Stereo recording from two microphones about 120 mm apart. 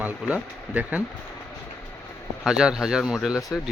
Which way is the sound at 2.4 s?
5° right (ahead or behind).